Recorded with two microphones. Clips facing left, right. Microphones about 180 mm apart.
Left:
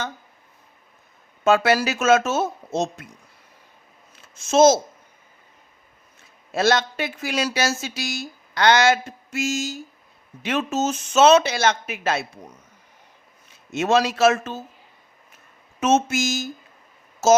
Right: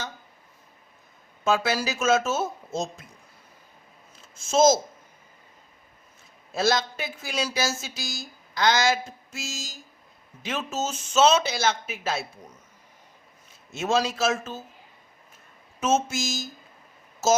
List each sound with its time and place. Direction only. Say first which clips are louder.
1.5 s speech: left 6 dB; 65° left (ahead or behind)
4.1 s a sound: left 4 dB; 70° left (ahead or behind)
6.5 s speech: left 4 dB; 70° left (ahead or behind)
13.7 s speech: left 5 dB; 70° left (ahead or behind)
15.8 s speech: left 5 dB; 70° left (ahead or behind)